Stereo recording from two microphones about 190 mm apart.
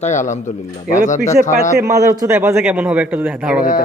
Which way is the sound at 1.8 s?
15° right (ahead or behind).